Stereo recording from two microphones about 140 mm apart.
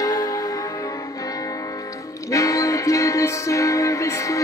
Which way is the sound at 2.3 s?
25° left (ahead or behind).